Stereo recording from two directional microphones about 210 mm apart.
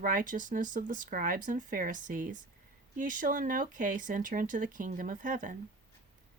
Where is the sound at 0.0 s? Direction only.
40° right (ahead or behind).